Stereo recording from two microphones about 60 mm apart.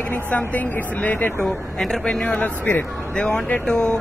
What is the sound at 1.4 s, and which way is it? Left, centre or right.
Speech, centre.